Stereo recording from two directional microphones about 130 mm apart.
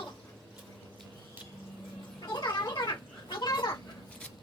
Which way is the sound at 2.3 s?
35° left (ahead or behind).